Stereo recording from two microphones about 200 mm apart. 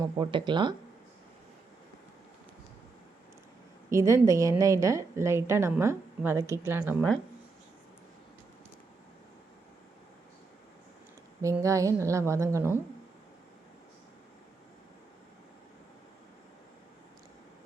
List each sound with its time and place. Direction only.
0.0 s speech: 20° right (ahead or behind)
3.8 s a woman's voice: 15° right (ahead or behind)
11.4 s a woman's voice: 15° right (ahead or behind)